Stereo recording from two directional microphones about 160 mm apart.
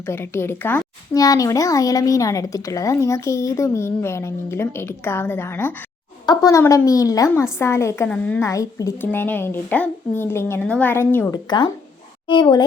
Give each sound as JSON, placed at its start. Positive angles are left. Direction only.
{"t": 0.0, "sound": "a woman's voice", "side_deg": 15}
{"t": 8.4, "sound": "a woman's voice", "side_deg": 20}
{"t": 11.4, "sound": "a child's voice", "side_deg": 30}